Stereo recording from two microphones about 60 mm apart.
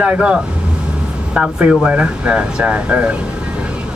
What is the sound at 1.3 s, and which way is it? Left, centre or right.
A man's voice, centre.